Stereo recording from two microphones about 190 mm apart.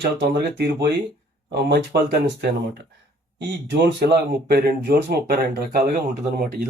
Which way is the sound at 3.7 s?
55° right (ahead or behind).